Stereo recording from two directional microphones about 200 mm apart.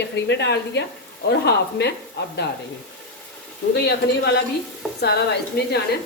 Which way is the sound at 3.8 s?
55° left (ahead or behind).